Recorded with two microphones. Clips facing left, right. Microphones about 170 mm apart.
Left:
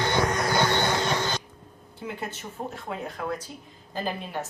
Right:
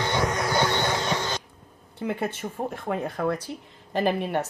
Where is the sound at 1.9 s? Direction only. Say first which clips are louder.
Right 6 dB; 60° right (ahead or behind).